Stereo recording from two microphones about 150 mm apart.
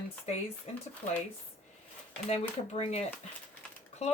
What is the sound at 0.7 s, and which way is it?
Speech, 45° left (ahead or behind).